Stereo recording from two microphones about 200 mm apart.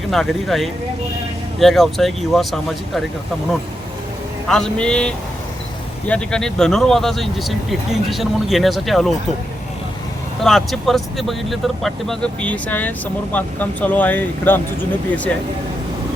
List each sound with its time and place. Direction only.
0.1 s speech: centre (ahead or behind)
4.4 s speech: centre (ahead or behind)
10.4 s speech: centre (ahead or behind)